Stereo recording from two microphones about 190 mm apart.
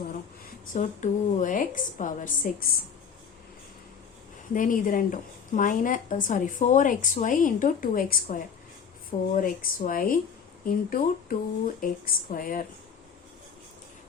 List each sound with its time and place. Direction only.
0.7 s a woman's voice: 40° left (ahead or behind)
4.5 s a woman's voice: 45° left (ahead or behind)